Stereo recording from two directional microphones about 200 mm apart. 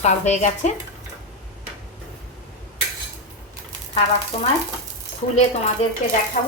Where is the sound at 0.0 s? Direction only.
35° left (ahead or behind).